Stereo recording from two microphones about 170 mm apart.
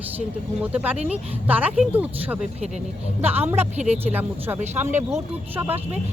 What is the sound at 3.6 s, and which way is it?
Speech, 40° right (ahead or behind).